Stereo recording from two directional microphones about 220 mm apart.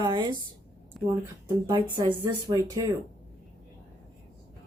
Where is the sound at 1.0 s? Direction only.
Centre (ahead or behind).